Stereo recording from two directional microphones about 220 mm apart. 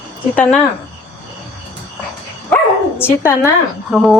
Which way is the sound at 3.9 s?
5° right (ahead or behind).